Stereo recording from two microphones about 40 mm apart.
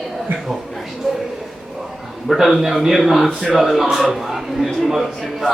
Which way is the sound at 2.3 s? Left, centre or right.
Centre.